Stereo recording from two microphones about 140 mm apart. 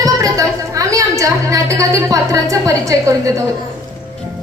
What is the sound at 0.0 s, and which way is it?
A woman's voice, 25° right (ahead or behind).